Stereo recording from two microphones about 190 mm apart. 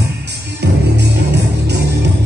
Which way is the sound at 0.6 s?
60° right (ahead or behind).